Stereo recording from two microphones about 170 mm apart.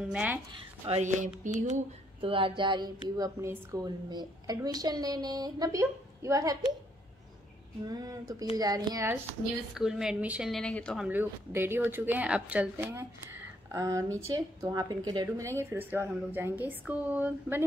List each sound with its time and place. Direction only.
0.1 s speech: 10° right (ahead or behind)
0.8 s a sound: 40° right (ahead or behind)
2.2 s speech: 30° right (ahead or behind)
7.8 s speech: 20° right (ahead or behind)
9.8 s a woman's voice: 5° right (ahead or behind)
11.1 s speech: 10° right (ahead or behind)